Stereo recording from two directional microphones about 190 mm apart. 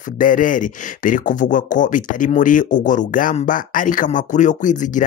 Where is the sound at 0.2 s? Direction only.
45° left (ahead or behind).